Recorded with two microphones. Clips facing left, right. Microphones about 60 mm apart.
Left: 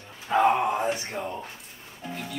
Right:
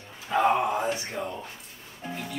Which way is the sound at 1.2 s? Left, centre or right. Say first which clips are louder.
Left 1 dB; centre.